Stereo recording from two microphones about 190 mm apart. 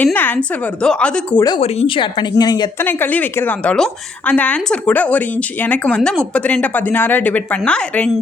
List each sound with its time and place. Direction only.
0.0 s a woman's voice: 10° left (ahead or behind)
1.5 s speech: 30° left (ahead or behind)
2.8 s a woman's voice: 10° left (ahead or behind)